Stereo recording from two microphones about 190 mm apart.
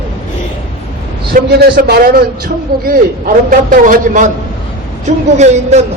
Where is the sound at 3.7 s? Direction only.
45° right (ahead or behind).